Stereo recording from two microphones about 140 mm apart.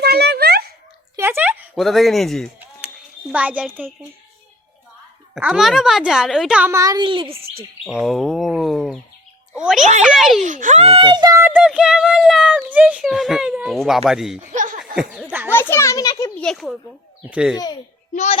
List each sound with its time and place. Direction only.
1.1 s a sound: 15° right (ahead or behind)
1.8 s speech: centre (ahead or behind)
2.8 s a sound: 10° right (ahead or behind)
3.3 s a child's voice: 10° right (ahead or behind)
5.3 s speech: 5° right (ahead or behind)
6.7 s a child's voice: 20° right (ahead or behind); by 7.6 s 40° right (ahead or behind)
7.9 s speech: 5° right (ahead or behind)
10.4 s a child's voice: 60° right (ahead or behind)
10.8 s speech: 40° right (ahead or behind); by 14.4 s 5° right (ahead or behind)
14.5 s laughter: 70° right (ahead or behind)
14.8 s a sound: 5° right (ahead or behind)
15.7 s a child's voice: 20° left (ahead or behind)
16.4 s a child's voice: centre (ahead or behind)